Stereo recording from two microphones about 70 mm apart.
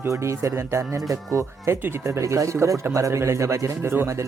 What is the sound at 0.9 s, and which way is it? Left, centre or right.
Speech, right.